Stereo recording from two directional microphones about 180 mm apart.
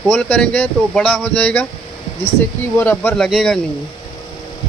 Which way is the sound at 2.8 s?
10° left (ahead or behind).